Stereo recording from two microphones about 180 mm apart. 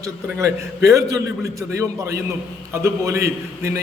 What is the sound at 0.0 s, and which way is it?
A man's voice, 15° right (ahead or behind).